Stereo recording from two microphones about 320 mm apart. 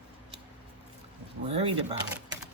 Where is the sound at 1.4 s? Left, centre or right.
Centre.